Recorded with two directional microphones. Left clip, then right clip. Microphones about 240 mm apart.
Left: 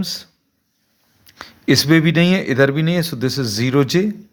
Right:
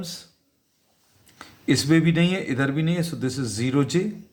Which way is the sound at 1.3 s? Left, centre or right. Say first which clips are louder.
Left 7 dB; left.